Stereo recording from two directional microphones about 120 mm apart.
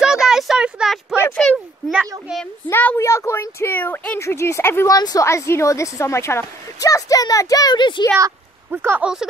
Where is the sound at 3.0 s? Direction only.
25° left (ahead or behind).